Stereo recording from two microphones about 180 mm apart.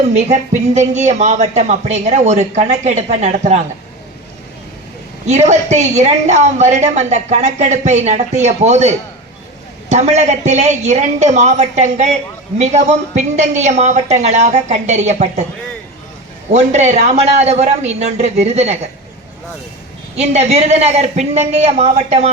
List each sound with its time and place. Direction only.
0.1 s a woman's voice: 40° right (ahead or behind)
5.2 s a woman's voice: 40° right (ahead or behind)
16.5 s a woman's voice: 40° right (ahead or behind)
20.1 s a woman's voice: 40° right (ahead or behind)